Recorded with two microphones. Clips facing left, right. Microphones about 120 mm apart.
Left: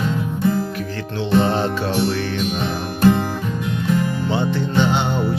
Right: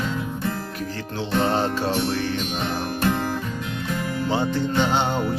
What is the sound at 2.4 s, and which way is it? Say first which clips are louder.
Music: left 3 dB; 5° left (ahead or behind).